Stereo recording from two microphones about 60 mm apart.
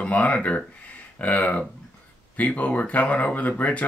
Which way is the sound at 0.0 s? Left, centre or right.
Left.